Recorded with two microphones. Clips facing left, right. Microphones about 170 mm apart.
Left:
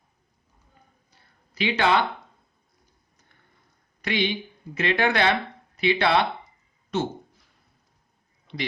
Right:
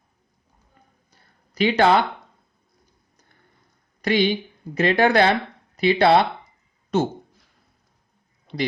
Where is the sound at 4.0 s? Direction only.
40° right (ahead or behind).